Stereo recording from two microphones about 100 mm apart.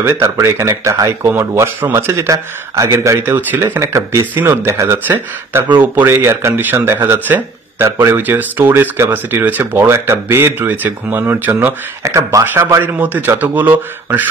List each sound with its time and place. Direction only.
0.0 s speech: 25° right (ahead or behind)
12.9 s speech: 15° right (ahead or behind)